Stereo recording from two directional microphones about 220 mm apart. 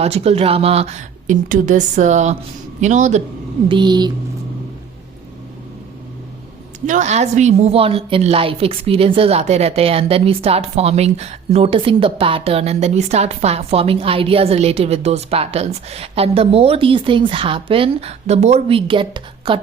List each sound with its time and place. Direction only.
0.0 s a woman's voice: 30° right (ahead or behind)
3.7 s a woman's voice: 20° right (ahead or behind)
6.8 s a woman's voice: 35° right (ahead or behind)